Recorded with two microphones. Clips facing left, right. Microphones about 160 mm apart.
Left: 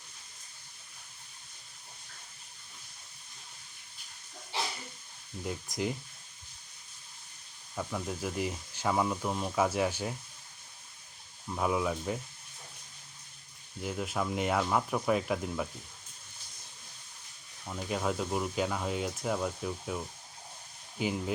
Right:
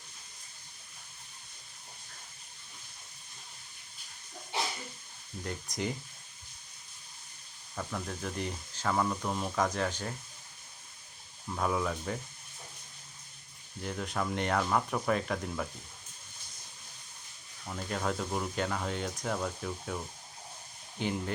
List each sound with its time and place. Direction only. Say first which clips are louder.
5.4 s speech: left 2 dB; 5° left (ahead or behind)
7.8 s speech: left 2 dB; 10° left (ahead or behind)
11.4 s speech: left 1 dB; 10° left (ahead or behind)
13.8 s speech: left 1 dB; 5° left (ahead or behind)
17.7 s speech: left 1 dB; 5° left (ahead or behind)
21.0 s speech: left 1 dB; 5° left (ahead or behind)